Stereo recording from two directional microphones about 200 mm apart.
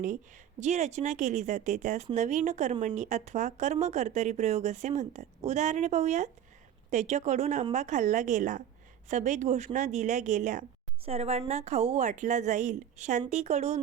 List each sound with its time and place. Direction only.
0.6 s speech: 35° right (ahead or behind)